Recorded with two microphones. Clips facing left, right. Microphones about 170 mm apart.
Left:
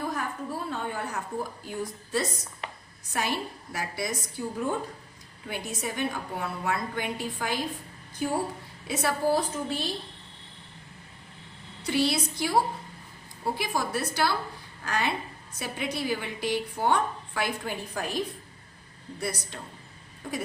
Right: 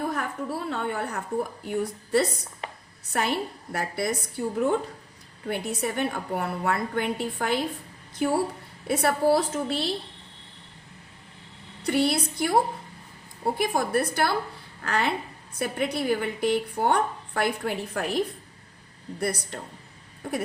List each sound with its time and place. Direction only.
0.0 s a sound: 60° right (ahead or behind)
1.6 s a woman's voice: 65° right (ahead or behind)
8.9 s a woman's voice: 60° right (ahead or behind)
11.9 s a woman's voice: 60° right (ahead or behind)
19.2 s speech: 60° right (ahead or behind)